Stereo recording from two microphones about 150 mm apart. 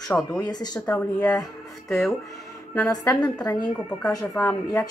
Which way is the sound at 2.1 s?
20° left (ahead or behind).